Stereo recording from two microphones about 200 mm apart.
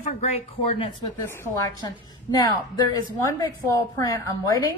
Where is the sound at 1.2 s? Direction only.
10° left (ahead or behind).